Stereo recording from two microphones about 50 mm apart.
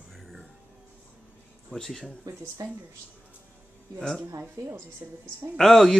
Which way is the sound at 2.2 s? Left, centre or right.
Right.